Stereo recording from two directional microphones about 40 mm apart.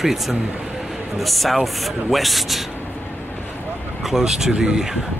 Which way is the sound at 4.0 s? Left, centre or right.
Centre.